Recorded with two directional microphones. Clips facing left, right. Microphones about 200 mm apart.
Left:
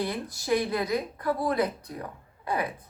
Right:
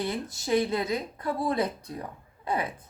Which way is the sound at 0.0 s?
25° right (ahead or behind).